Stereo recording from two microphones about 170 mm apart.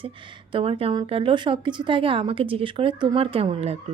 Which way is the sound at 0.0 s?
30° right (ahead or behind).